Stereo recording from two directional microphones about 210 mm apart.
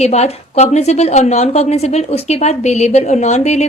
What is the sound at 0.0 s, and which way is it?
A woman's voice, 30° left (ahead or behind).